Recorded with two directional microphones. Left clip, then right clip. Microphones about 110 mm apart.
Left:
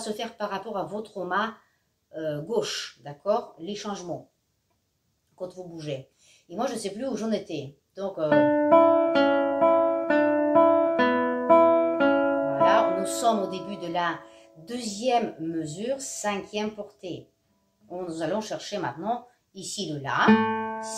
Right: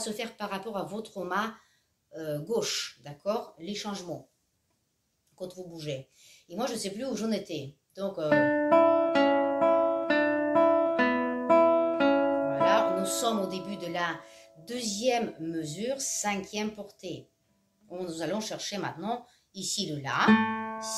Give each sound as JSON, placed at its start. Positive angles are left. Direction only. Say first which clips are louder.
{"t": 0.0, "sound": "speech", "louder": "left 4 dB", "side_deg": -20}
{"t": 6.5, "sound": "speech", "louder": "left 3 dB", "side_deg": -20}
{"t": 8.4, "sound": "music", "louder": "left 5 dB", "side_deg": 0}
{"t": 12.4, "sound": "speech", "louder": "left 5 dB", "side_deg": -15}